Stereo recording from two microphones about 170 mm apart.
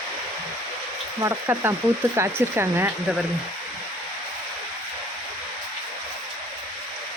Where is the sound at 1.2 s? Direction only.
15° right (ahead or behind).